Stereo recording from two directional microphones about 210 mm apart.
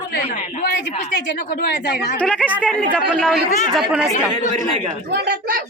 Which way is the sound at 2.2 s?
5° left (ahead or behind).